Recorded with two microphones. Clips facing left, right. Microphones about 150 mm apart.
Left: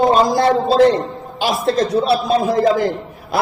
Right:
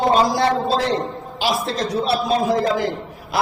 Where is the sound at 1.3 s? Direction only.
50° left (ahead or behind).